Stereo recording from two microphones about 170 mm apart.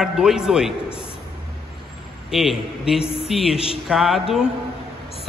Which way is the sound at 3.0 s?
35° left (ahead or behind).